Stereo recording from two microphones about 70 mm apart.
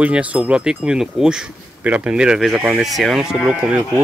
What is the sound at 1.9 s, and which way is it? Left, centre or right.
Speech, right.